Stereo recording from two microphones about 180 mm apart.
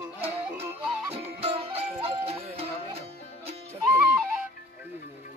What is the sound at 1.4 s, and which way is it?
Music, 30° right (ahead or behind).